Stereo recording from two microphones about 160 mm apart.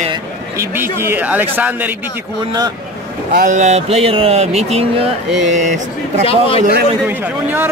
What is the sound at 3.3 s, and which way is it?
Speech, 55° right (ahead or behind).